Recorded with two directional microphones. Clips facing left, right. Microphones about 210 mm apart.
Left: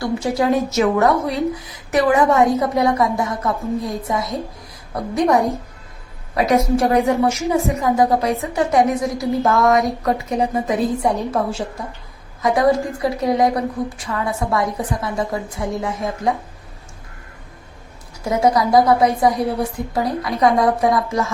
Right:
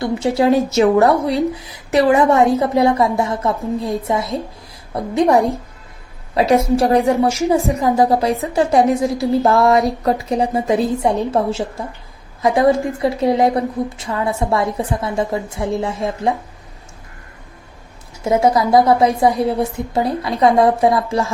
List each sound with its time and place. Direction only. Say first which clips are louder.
0.0 s a woman's voice: right 3 dB; 25° right (ahead or behind)
6.3 s a woman's voice: right 2 dB; 25° right (ahead or behind)
18.3 s a woman's voice: right 2 dB; 25° right (ahead or behind)